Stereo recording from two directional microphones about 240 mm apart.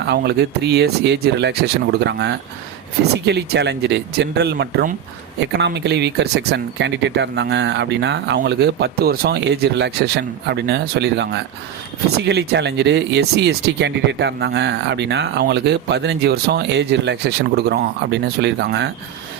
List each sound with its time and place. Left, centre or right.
0.1 s speech: right